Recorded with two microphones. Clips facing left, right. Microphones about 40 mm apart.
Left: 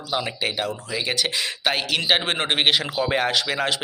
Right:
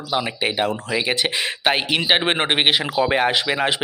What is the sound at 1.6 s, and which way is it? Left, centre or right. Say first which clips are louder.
Speech: right 3 dB; right.